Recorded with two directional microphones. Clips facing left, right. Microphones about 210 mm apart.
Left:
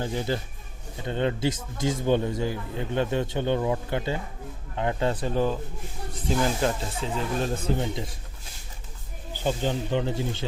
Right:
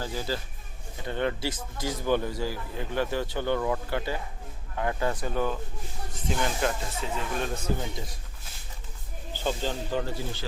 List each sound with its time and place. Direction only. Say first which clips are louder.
0.0 s a man's voice: left 4 dB; 20° left (ahead or behind)
9.4 s a man's voice: left 3 dB; 20° left (ahead or behind)